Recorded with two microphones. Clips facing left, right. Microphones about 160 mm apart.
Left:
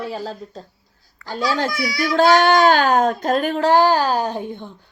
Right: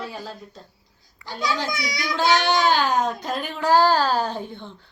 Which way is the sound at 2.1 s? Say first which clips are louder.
Left 7 dB; 50° left (ahead or behind).